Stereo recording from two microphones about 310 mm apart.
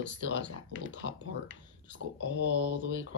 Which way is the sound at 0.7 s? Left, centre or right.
Right.